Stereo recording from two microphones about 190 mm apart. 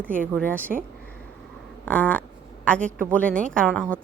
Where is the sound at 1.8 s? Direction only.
5° left (ahead or behind).